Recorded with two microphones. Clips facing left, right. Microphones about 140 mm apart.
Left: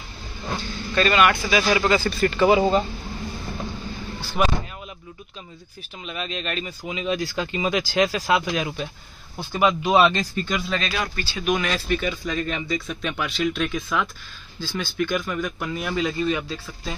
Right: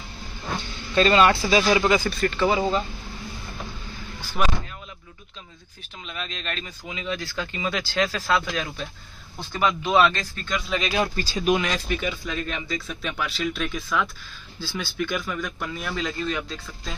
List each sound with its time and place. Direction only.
0.9 s speech: 25° right (ahead or behind)
1.7 s speech: 15° right (ahead or behind)
2.0 s speech: 5° left (ahead or behind)
2.4 s speech: 15° left (ahead or behind)
4.4 s speech: 5° left (ahead or behind)
6.0 s speech: 5° left (ahead or behind)
6.9 s speech: 20° left (ahead or behind)
10.7 s speech: 15° right (ahead or behind)
11.1 s speech: 35° right (ahead or behind)
11.6 s speech: 15° right (ahead or behind); by 16.9 s 5° left (ahead or behind)